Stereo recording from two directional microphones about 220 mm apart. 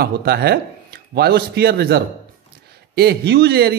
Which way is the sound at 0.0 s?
45° right (ahead or behind).